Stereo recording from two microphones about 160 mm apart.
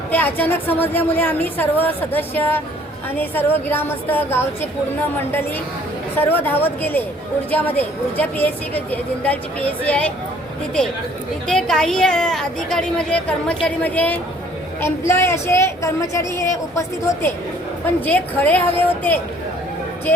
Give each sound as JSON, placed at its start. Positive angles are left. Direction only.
{"t": 0.1, "sound": "a woman's voice", "side_deg": 10}
{"t": 6.1, "sound": "a woman's voice", "side_deg": 15}
{"t": 11.4, "sound": "a woman's voice", "side_deg": 5}
{"t": 18.0, "sound": "a woman's voice", "side_deg": 10}